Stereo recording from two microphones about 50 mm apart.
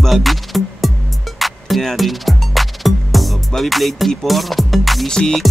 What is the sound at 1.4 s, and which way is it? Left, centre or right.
Speech, centre.